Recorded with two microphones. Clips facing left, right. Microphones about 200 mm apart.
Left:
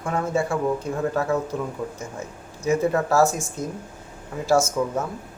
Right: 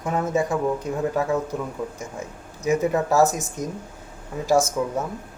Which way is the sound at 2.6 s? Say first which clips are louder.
Even; 15° right (ahead or behind).